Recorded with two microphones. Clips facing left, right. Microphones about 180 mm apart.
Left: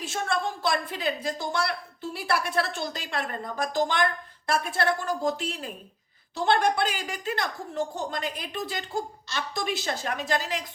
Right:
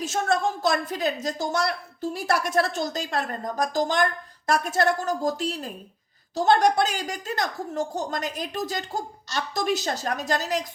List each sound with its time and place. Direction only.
0.0 s a woman's voice: 45° right (ahead or behind)